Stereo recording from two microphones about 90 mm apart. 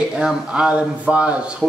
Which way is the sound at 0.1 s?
10° right (ahead or behind).